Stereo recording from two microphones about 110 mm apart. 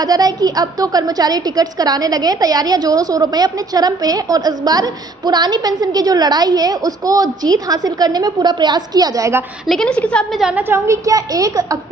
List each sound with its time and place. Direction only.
0.0 s a woman's voice: 35° right (ahead or behind)
9.6 s a woman's voice: 5° left (ahead or behind)
10.5 s a woman's voice: 20° right (ahead or behind)